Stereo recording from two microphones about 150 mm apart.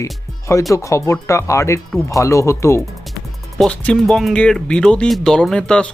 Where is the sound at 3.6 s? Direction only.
5° left (ahead or behind).